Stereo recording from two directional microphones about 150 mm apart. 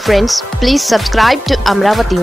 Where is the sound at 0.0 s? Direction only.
Centre (ahead or behind).